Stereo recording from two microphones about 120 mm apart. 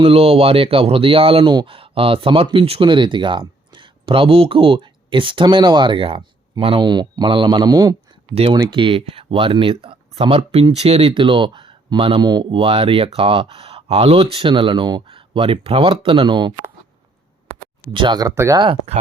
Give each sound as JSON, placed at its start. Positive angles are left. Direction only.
{"t": 0.0, "sound": "speech", "side_deg": -55}
{"t": 12.2, "sound": "speech", "side_deg": -35}
{"t": 15.0, "sound": "speech", "side_deg": -50}
{"t": 17.9, "sound": "speech", "side_deg": -40}